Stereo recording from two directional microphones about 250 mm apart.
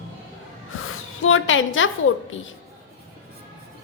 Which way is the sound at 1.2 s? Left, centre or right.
Left.